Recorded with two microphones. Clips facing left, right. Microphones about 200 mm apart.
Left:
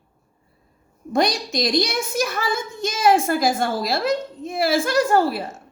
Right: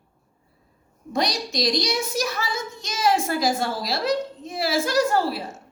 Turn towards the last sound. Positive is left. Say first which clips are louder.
# left 3 dB
turn(degrees=50)  # may be behind; listen again after turning